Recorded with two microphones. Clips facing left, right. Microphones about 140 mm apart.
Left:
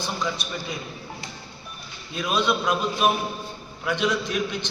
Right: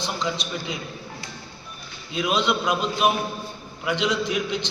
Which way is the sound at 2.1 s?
15° right (ahead or behind).